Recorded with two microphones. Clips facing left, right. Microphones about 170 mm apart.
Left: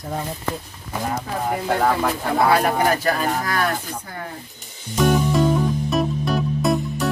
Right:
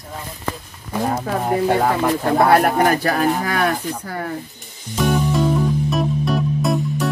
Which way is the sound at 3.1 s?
60° right (ahead or behind).